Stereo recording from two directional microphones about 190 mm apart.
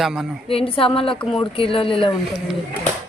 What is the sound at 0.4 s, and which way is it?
A woman's voice, 30° left (ahead or behind).